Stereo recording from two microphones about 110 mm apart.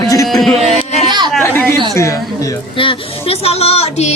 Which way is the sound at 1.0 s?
40° right (ahead or behind).